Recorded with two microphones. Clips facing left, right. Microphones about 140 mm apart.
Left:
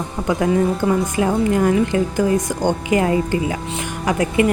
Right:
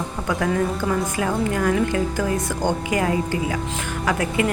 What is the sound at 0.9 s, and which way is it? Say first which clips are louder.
A woman's voice: left 5 dB; 20° left (ahead or behind).